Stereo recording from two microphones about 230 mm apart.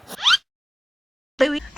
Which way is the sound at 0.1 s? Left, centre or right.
Centre.